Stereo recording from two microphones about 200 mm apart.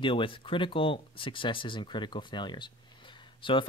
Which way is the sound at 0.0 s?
25° left (ahead or behind).